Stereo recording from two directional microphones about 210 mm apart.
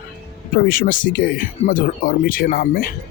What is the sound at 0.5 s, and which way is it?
Speech, 45° left (ahead or behind).